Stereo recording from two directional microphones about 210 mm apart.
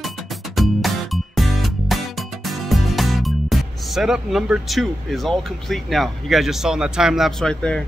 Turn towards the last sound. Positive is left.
turn(degrees=5)  # may be behind; listen again after turning